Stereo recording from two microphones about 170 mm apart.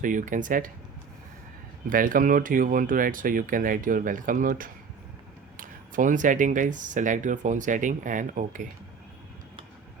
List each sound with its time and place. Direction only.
0.0 s speech: 50° right (ahead or behind)
1.9 s speech: 55° right (ahead or behind)